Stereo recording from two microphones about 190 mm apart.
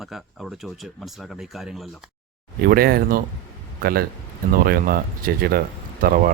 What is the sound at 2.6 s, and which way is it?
Speech, 55° right (ahead or behind).